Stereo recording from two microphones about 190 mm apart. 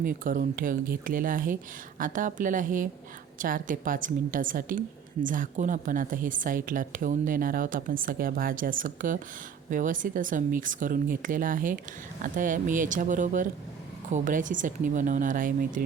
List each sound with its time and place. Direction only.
0.0 s a woman's voice: 50° right (ahead or behind)